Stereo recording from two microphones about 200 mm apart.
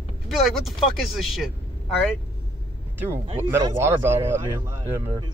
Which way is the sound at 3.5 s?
10° right (ahead or behind).